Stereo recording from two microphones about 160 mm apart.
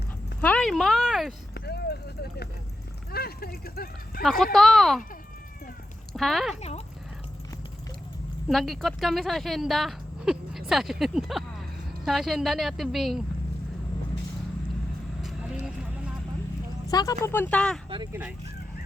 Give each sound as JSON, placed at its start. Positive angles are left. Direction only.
{"t": 0.4, "sound": "speech", "side_deg": 5}
{"t": 1.5, "sound": "a sound", "side_deg": 90}
{"t": 3.1, "sound": "speech", "side_deg": 75}
{"t": 4.2, "sound": "a woman's voice", "side_deg": 0}
{"t": 6.1, "sound": "a woman's voice", "side_deg": 0}
{"t": 6.6, "sound": "speech", "side_deg": 40}
{"t": 8.4, "sound": "a woman's voice", "side_deg": 0}
{"t": 16.8, "sound": "speech", "side_deg": 20}
{"t": 17.8, "sound": "speech", "side_deg": -30}
{"t": 18.1, "sound": "speech", "side_deg": -10}